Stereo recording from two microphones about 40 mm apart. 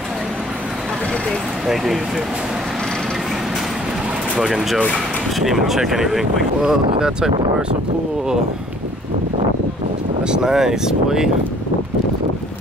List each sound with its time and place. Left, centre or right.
4.4 s speech: centre
7.0 s speech: centre
10.2 s speech: centre